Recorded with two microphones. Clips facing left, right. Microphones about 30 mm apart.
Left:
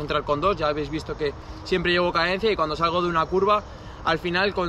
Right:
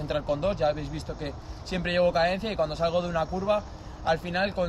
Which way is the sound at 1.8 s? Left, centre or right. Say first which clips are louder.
Left 2 dB; left.